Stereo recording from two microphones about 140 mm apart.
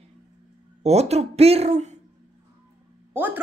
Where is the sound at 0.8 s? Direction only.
50° right (ahead or behind).